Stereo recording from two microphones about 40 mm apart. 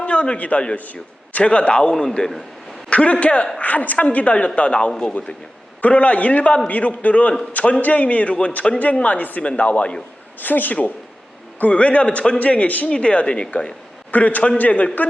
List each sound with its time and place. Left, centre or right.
0.0 s a man's voice: left
11.6 s a woman's voice: left
12.9 s speech: left
14.1 s a woman's voice: left